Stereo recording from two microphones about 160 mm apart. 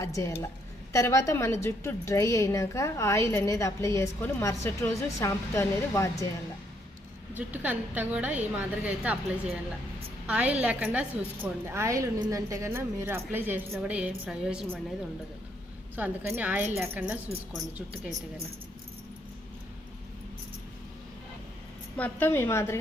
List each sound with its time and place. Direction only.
0.0 s a woman's voice: 20° left (ahead or behind)
7.3 s a woman's voice: 10° right (ahead or behind)
10.2 s a woman's voice: 10° right (ahead or behind)
16.0 s a woman's voice: 10° right (ahead or behind)
21.9 s a woman's voice: 10° left (ahead or behind)